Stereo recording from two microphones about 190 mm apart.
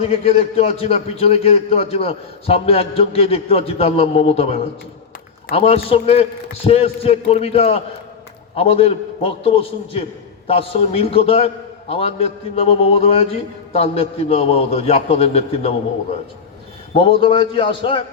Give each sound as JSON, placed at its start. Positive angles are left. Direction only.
{"t": 0.0, "sound": "a man's voice", "side_deg": 30}
{"t": 16.9, "sound": "a man's voice", "side_deg": 30}